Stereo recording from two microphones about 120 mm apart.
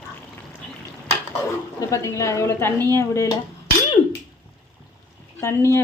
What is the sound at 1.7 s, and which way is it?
A woman's voice, 25° left (ahead or behind).